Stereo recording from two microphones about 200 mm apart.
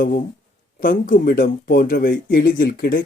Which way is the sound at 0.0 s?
45° left (ahead or behind).